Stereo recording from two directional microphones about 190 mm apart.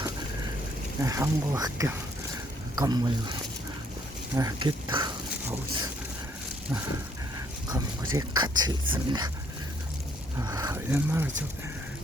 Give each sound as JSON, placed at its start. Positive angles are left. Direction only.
{"t": 1.0, "sound": "speech", "side_deg": -20}
{"t": 4.4, "sound": "speech", "side_deg": -20}
{"t": 7.7, "sound": "speech", "side_deg": -20}
{"t": 10.4, "sound": "speech", "side_deg": -20}